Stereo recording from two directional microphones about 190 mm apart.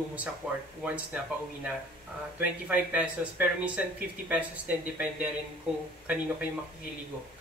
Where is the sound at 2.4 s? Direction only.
5° right (ahead or behind).